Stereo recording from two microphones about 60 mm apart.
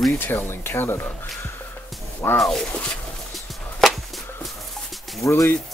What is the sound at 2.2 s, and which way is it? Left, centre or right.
Speech, left.